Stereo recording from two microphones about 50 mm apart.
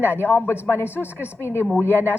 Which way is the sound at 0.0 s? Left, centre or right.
Left.